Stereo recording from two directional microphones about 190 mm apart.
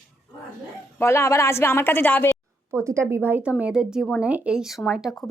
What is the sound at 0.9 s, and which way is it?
A woman's voice, 15° left (ahead or behind).